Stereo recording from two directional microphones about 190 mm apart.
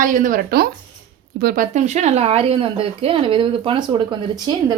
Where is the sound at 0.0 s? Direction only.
45° right (ahead or behind).